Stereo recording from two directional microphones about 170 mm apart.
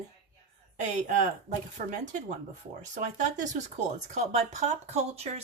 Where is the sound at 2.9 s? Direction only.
45° right (ahead or behind).